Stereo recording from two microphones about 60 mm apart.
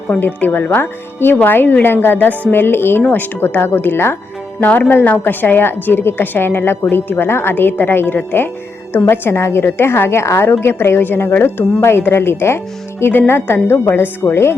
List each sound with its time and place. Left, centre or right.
0.2 s a woman's voice: left
9.2 s a woman's voice: left